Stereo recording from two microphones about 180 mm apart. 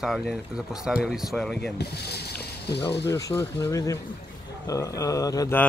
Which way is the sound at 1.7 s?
65° left (ahead or behind).